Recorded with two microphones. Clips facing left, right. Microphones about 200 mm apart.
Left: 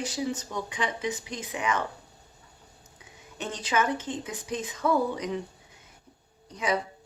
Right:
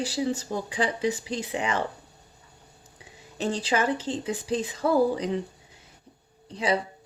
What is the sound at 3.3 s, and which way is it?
Speech, 35° right (ahead or behind).